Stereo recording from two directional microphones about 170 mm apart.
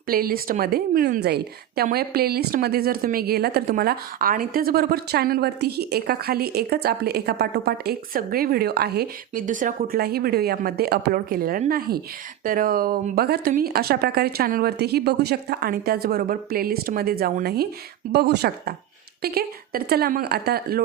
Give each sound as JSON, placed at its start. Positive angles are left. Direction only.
{"t": 0.1, "sound": "a woman's voice", "side_deg": -60}
{"t": 9.5, "sound": "a woman's voice", "side_deg": -50}
{"t": 18.1, "sound": "a woman's voice", "side_deg": -75}